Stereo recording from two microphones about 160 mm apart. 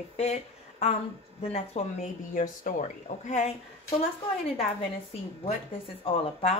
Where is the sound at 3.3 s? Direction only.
45° left (ahead or behind).